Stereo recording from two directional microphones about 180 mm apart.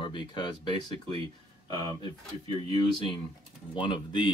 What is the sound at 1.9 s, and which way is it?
Speech, 30° right (ahead or behind).